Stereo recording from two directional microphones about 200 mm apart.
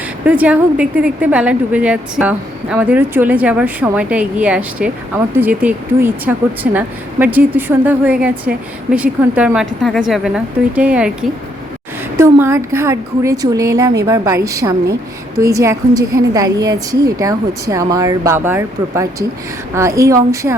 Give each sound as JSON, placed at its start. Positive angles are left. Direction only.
{"t": 0.3, "sound": "a woman's voice", "side_deg": -5}